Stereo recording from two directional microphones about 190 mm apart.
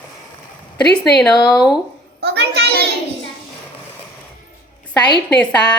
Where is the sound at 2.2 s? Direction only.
60° right (ahead or behind).